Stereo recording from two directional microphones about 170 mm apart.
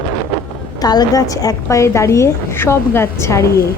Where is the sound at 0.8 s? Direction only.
25° left (ahead or behind).